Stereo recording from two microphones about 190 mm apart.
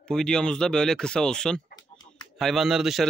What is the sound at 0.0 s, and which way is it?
Speech, 5° left (ahead or behind).